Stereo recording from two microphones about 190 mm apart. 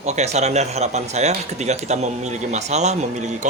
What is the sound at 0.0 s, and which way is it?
Speech, 35° right (ahead or behind).